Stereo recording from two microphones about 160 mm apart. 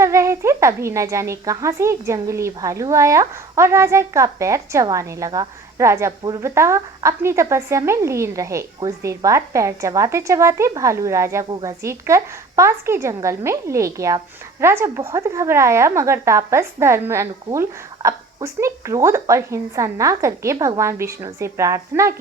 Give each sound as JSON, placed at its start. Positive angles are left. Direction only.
{"t": 0.0, "sound": "a woman's voice", "side_deg": -20}